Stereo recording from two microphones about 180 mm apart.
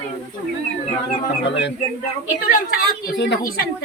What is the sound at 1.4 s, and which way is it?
Speech, 75° left (ahead or behind).